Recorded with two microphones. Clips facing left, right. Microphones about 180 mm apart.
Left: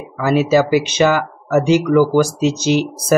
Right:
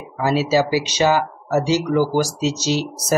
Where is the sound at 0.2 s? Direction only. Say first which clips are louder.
Left 4 dB; 55° left (ahead or behind).